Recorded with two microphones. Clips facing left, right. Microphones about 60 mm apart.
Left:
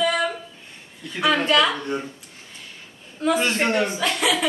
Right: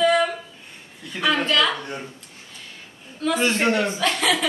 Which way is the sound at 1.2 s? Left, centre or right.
Centre.